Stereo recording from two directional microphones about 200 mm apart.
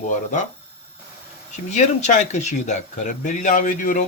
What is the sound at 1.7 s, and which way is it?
A man's voice, 35° left (ahead or behind).